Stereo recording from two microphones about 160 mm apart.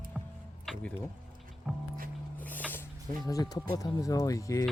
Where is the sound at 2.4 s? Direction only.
10° left (ahead or behind).